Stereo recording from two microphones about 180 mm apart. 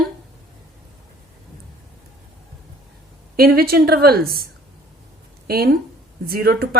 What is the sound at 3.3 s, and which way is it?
Speech, 60° right (ahead or behind).